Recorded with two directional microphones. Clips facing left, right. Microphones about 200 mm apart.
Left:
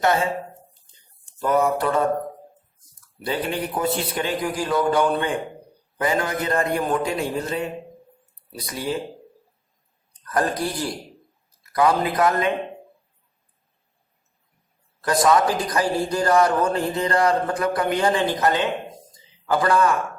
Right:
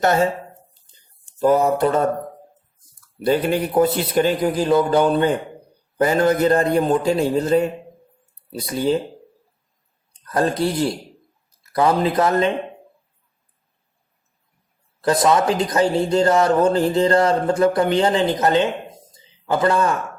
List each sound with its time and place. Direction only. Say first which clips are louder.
0.0 s a man's voice: right 3 dB; 40° right (ahead or behind)
1.4 s a man's voice: right 4 dB; 30° right (ahead or behind)
3.8 s a man's voice: right 9 dB; 40° right (ahead or behind)
4.5 s speech: right 2 dB; 25° right (ahead or behind)
6.0 s a man's voice: right 7 dB; 40° right (ahead or behind)
10.1 s speech: right 3 dB; 25° right (ahead or behind)
15.0 s speech: right 2 dB; 25° right (ahead or behind)